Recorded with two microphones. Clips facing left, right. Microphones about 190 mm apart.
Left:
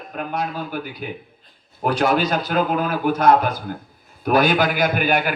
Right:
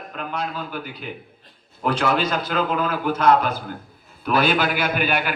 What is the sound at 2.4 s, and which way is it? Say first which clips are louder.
Speech: left 3 dB; 40° left (ahead or behind).